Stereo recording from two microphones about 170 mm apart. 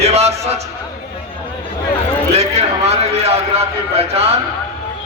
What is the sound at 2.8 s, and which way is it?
A man's voice, 35° right (ahead or behind).